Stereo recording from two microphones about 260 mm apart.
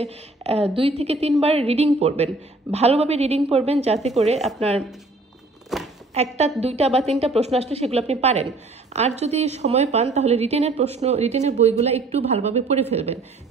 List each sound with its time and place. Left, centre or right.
0.0 s a woman's voice: right
5.7 s a sound: centre
6.2 s a woman's voice: right